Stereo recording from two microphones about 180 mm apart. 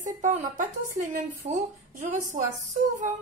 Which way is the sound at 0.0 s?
40° right (ahead or behind).